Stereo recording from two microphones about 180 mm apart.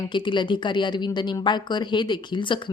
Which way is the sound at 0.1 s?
25° left (ahead or behind).